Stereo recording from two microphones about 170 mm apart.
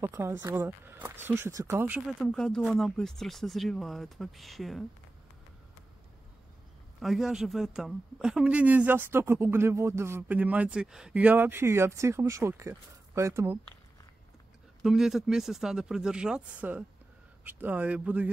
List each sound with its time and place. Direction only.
0.0 s speech: 15° right (ahead or behind)
2.0 s speech: centre (ahead or behind)
7.0 s speech: centre (ahead or behind); by 13.6 s 15° right (ahead or behind)
14.8 s speech: centre (ahead or behind)